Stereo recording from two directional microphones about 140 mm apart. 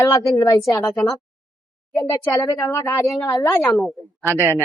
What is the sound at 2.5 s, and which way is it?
Speech, 25° left (ahead or behind).